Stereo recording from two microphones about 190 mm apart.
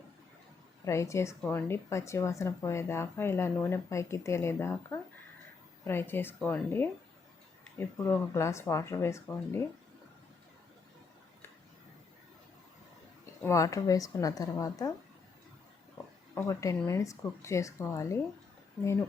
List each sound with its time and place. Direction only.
0.9 s speech: 15° left (ahead or behind)
13.4 s speech: 15° left (ahead or behind)
16.3 s speech: 15° left (ahead or behind)